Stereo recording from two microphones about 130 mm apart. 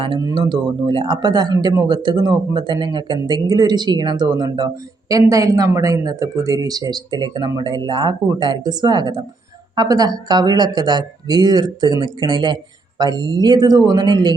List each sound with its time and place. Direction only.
0.2 s speech: 30° right (ahead or behind)